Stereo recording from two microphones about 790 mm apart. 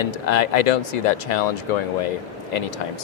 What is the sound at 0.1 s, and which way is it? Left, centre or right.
Speech, left.